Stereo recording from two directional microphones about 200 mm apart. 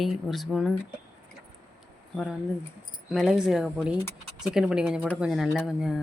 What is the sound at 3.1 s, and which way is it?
Speech, centre (ahead or behind).